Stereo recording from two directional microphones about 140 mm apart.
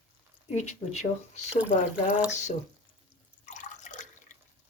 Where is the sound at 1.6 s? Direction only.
10° right (ahead or behind).